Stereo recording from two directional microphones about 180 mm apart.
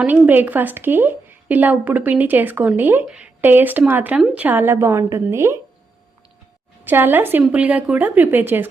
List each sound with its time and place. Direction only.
0.0 s a woman's voice: 10° right (ahead or behind)
6.8 s a woman's voice: 10° right (ahead or behind)